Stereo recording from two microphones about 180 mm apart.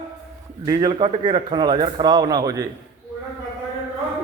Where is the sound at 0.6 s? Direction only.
25° right (ahead or behind).